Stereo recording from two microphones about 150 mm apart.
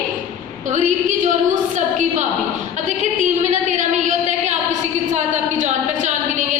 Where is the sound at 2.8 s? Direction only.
55° right (ahead or behind).